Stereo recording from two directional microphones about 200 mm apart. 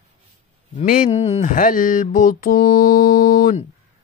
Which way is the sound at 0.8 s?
45° left (ahead or behind).